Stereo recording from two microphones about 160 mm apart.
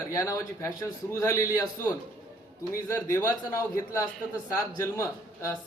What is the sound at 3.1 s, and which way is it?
A man's voice, 20° left (ahead or behind).